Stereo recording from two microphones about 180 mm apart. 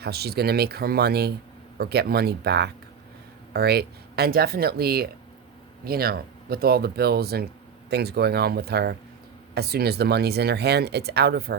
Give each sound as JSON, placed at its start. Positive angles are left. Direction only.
{"t": 0.0, "sound": "speech", "side_deg": -60}